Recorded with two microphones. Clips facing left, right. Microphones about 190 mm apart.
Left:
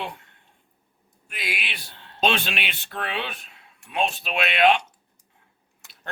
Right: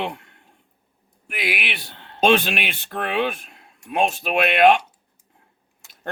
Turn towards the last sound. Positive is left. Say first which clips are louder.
# right 5 dB
turn(degrees=-50)  # may be behind; listen again after turning